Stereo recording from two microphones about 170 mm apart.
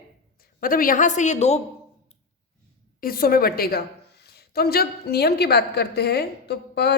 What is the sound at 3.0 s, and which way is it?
A woman's voice, 60° left (ahead or behind).